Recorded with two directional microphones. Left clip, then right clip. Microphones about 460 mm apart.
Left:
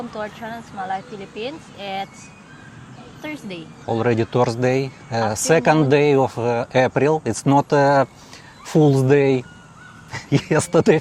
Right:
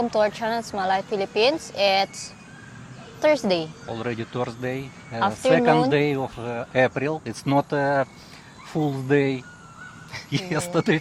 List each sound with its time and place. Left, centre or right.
0.1 s speech: right
3.2 s speech: right
3.8 s speech: left